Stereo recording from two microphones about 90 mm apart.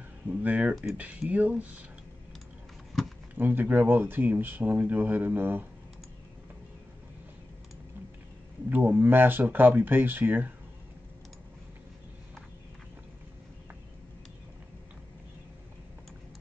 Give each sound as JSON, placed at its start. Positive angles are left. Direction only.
{"t": 0.3, "sound": "speech", "side_deg": -15}
{"t": 2.9, "sound": "a sound", "side_deg": 0}
{"t": 3.3, "sound": "speech", "side_deg": -20}
{"t": 8.6, "sound": "speech", "side_deg": -20}